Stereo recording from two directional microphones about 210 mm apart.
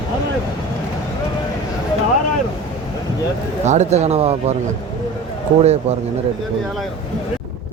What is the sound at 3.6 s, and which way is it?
Speech, 35° right (ahead or behind).